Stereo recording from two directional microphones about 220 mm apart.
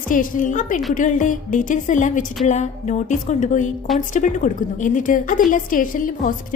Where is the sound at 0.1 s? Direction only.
35° left (ahead or behind).